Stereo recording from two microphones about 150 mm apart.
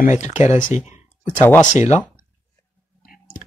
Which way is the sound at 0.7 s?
50° left (ahead or behind).